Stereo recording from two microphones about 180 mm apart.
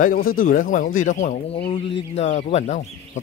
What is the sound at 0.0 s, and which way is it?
Speech, 55° left (ahead or behind).